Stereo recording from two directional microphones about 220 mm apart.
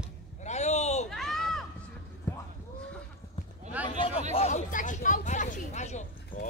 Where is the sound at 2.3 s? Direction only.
10° left (ahead or behind).